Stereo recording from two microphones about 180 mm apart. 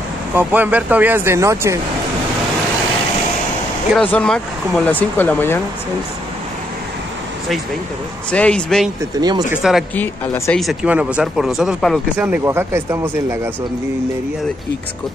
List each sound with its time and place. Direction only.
0.4 s speech: 10° right (ahead or behind)
3.9 s speech: 5° left (ahead or behind)
8.3 s speech: 5° left (ahead or behind)
9.1 s speech: 20° right (ahead or behind)
9.5 s speech: 5° right (ahead or behind)
9.9 s speech: 10° left (ahead or behind)
10.6 s speech: 5° right (ahead or behind)